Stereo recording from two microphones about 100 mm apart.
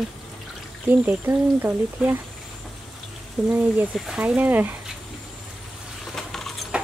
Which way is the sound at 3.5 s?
10° right (ahead or behind).